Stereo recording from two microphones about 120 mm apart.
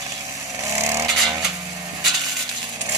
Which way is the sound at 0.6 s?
25° right (ahead or behind).